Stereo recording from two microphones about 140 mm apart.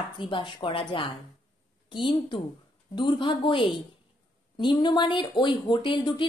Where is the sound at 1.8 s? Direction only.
35° left (ahead or behind).